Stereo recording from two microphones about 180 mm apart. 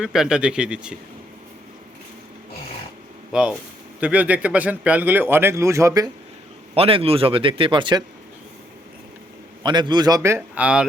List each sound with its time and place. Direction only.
0.0 s speech: 5° right (ahead or behind)
3.3 s speech: 5° right (ahead or behind)
6.7 s speech: 30° right (ahead or behind)
9.6 s speech: 25° right (ahead or behind); by 10.8 s 5° right (ahead or behind)